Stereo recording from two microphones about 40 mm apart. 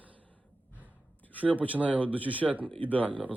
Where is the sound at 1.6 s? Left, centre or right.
Right.